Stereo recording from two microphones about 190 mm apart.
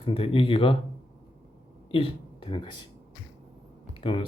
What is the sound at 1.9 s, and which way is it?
Speech, 25° left (ahead or behind).